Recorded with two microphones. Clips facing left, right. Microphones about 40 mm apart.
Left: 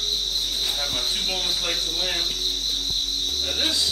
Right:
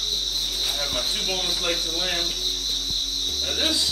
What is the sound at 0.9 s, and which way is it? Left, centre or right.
Speech, centre.